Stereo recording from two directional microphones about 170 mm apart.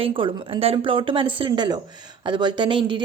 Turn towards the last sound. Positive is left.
turn(degrees=-30)  # may be behind; listen again after turning